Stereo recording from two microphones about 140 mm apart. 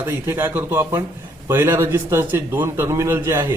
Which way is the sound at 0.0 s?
15° right (ahead or behind).